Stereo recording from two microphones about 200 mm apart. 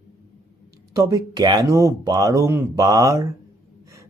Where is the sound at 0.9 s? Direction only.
20° right (ahead or behind).